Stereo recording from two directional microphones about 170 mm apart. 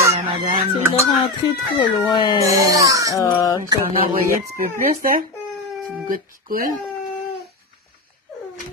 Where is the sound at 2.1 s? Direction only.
25° left (ahead or behind).